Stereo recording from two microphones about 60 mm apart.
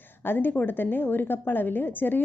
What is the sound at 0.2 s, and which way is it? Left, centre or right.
A woman's voice, left.